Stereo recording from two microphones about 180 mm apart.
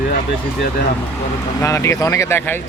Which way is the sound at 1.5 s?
15° left (ahead or behind).